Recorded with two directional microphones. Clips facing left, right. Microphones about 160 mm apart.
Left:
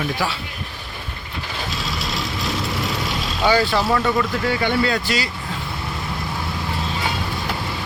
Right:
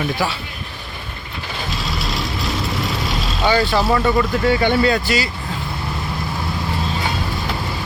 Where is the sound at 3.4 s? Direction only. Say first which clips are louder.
Even; 10° left (ahead or behind).